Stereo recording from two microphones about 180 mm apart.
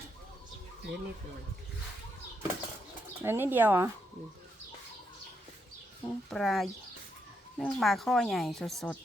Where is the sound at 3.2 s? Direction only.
15° right (ahead or behind).